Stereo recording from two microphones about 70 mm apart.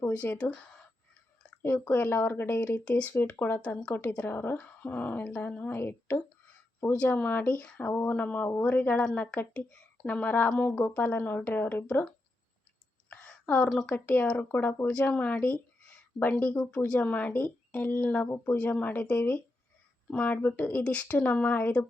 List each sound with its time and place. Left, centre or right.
0.1 s a woman's voice: left
1.6 s a woman's voice: left
5.7 s speech: left
6.9 s a woman's voice: centre
8.4 s a woman's voice: left
13.8 s a woman's voice: left
20.8 s a woman's voice: centre